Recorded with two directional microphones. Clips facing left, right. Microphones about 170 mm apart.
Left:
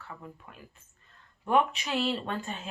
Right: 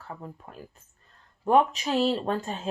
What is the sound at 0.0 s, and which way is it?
Speech, 40° right (ahead or behind).